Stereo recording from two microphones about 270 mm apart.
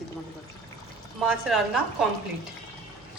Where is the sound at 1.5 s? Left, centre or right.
Centre.